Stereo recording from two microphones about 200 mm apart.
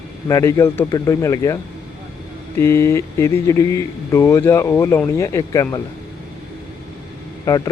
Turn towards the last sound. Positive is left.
turn(degrees=15)  # may be behind; listen again after turning